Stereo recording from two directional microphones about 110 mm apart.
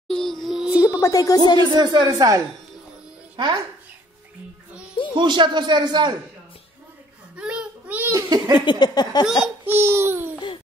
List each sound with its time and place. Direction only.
0.1 s music: 5° left (ahead or behind)
0.8 s speech: 30° left (ahead or behind)
1.7 s a child's voice: 40° right (ahead or behind)
5.1 s a man's voice: 45° right (ahead or behind)
7.3 s a sound: 10° right (ahead or behind)
8.1 s laughter: 30° right (ahead or behind)
8.6 s a sound: 40° left (ahead or behind)
9.7 s speech: 20° right (ahead or behind)